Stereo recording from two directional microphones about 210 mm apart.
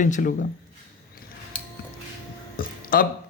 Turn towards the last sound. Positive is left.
turn(degrees=45)  # may be behind; listen again after turning